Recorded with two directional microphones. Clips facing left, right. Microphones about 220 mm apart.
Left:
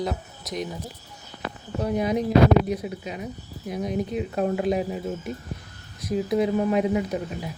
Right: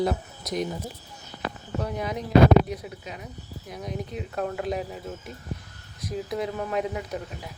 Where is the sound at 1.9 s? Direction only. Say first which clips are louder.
Left 1 dB; 15° left (ahead or behind).